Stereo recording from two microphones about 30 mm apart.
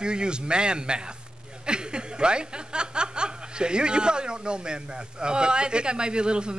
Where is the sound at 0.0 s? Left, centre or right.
Right.